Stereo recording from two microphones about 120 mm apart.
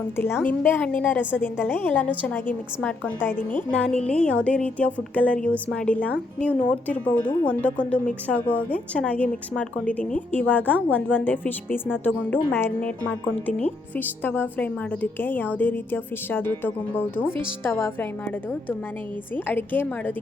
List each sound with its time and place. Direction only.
0.2 s a woman's voice: 20° left (ahead or behind)
19.5 s a woman's voice: 15° left (ahead or behind)